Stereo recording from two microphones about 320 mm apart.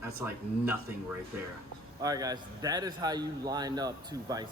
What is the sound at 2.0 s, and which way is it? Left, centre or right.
Speech, centre.